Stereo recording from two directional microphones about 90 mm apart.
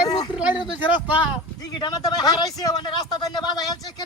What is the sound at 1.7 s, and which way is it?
Speech, 50° left (ahead or behind).